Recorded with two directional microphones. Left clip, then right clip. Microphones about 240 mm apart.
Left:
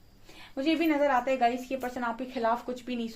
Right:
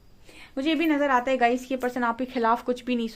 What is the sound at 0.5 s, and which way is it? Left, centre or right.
Speech, right.